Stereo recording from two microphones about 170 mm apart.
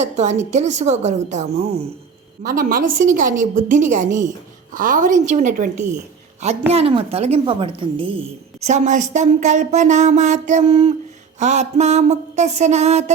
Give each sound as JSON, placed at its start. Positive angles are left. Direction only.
{"t": 0.0, "sound": "a woman's voice", "side_deg": -40}
{"t": 2.4, "sound": "a woman's voice", "side_deg": -55}
{"t": 6.7, "sound": "a woman's voice", "side_deg": -35}